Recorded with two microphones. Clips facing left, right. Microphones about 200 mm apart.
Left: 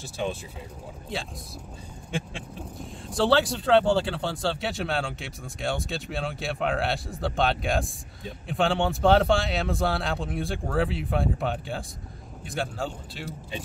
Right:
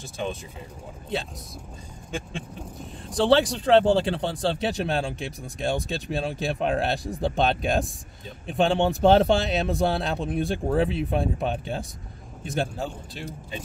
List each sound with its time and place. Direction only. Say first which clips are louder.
3.3 s a man's voice: right 3 dB; 20° right (ahead or behind)